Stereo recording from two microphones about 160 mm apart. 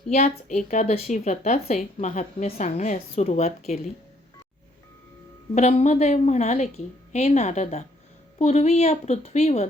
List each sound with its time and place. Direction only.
0.1 s a woman's voice: 45° left (ahead or behind)
5.5 s a woman's voice: 45° left (ahead or behind)